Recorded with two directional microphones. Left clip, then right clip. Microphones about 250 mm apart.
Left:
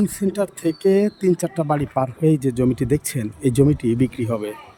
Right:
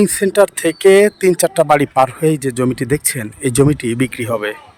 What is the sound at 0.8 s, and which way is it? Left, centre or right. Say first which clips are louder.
Speech: right 10 dB; right.